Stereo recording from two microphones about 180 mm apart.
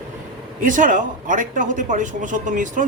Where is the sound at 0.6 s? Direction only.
45° right (ahead or behind).